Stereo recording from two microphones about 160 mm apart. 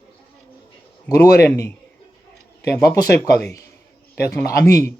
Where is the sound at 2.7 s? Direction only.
20° left (ahead or behind).